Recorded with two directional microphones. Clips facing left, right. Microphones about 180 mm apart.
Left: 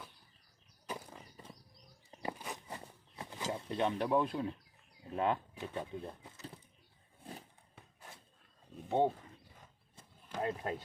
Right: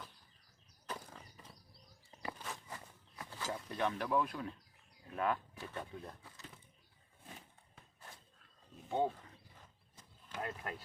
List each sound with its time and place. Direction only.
0.9 s a sound: 10° left (ahead or behind)
2.0 s walk: 15° left (ahead or behind)
2.6 s a sound: 25° left (ahead or behind)
5.1 s speech: 25° left (ahead or behind)
8.9 s speech: 30° left (ahead or behind)
10.3 s speech: 30° left (ahead or behind)